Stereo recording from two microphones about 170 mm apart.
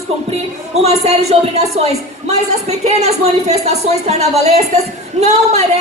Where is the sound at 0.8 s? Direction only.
40° right (ahead or behind).